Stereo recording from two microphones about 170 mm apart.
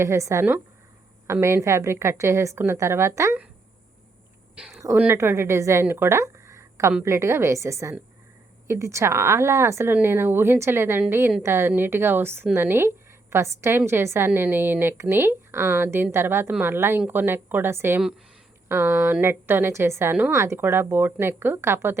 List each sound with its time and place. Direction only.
0.0 s a woman's voice: 15° right (ahead or behind)
4.5 s a woman's voice: 5° right (ahead or behind)